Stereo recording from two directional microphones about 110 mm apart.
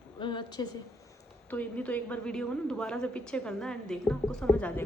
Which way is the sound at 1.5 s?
15° left (ahead or behind).